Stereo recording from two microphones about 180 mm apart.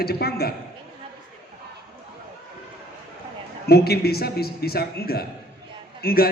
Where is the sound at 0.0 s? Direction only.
60° left (ahead or behind).